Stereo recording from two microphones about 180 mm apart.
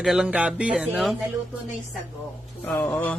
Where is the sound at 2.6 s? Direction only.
10° left (ahead or behind).